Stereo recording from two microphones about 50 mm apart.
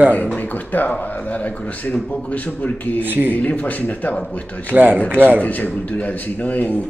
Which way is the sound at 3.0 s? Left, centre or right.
Right.